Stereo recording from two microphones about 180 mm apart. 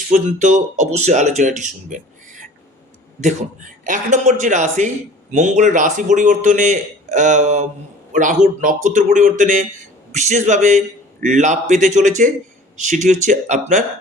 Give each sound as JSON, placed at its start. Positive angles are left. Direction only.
{"t": 0.1, "sound": "speech", "side_deg": -45}
{"t": 3.8, "sound": "a man's voice", "side_deg": -45}